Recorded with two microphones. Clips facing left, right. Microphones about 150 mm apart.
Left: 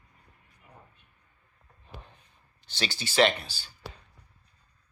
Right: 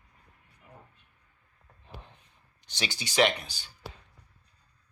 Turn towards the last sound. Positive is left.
turn(degrees=-15)  # may be behind; listen again after turning